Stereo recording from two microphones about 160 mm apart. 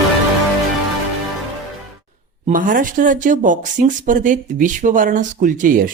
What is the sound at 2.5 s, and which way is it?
Speech, 55° right (ahead or behind).